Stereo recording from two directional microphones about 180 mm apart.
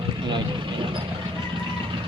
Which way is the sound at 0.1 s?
25° right (ahead or behind).